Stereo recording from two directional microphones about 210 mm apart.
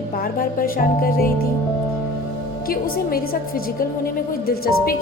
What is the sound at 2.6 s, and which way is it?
Speech, 45° left (ahead or behind).